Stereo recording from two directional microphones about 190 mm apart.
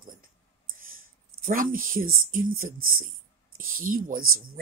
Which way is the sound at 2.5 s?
90° right.